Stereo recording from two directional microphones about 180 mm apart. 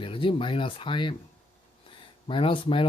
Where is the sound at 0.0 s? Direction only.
30° left (ahead or behind).